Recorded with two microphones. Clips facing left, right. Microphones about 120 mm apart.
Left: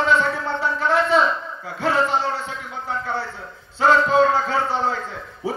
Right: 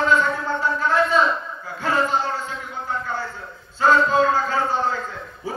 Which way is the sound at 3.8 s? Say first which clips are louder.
Left 1 dB; 70° left (ahead or behind).